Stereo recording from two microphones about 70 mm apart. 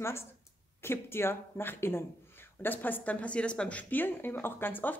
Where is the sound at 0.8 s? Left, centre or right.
Left.